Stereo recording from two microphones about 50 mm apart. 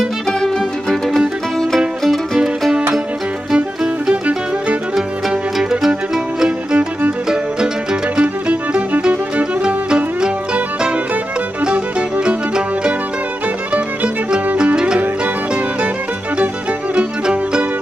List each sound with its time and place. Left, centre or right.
0.3 s music: centre
2.0 s music: centre
3.5 s music: centre
5.6 s music: centre
8.2 s music: right
12.3 s music: right
16.9 s music: right